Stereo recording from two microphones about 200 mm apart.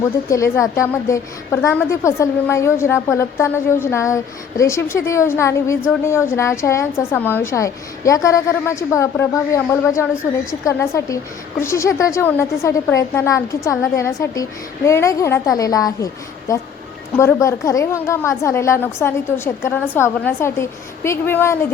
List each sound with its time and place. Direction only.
0.3 s a woman's voice: 15° left (ahead or behind)